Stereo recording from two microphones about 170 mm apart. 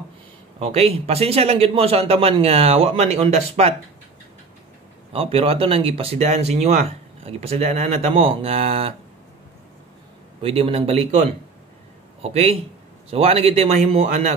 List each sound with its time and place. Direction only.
0.6 s speech: 35° right (ahead or behind)
5.1 s speech: 35° right (ahead or behind)
10.4 s speech: 35° right (ahead or behind)